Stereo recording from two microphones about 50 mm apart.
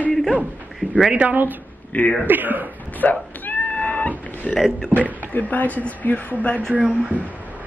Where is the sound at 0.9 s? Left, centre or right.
Centre.